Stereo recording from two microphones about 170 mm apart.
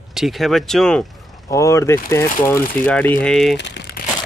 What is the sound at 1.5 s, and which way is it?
Speech, 20° left (ahead or behind).